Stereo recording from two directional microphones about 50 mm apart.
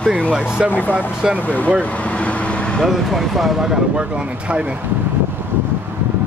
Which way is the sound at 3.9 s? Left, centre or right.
Right.